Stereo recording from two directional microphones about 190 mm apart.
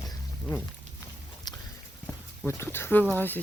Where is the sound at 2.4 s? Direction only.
10° left (ahead or behind).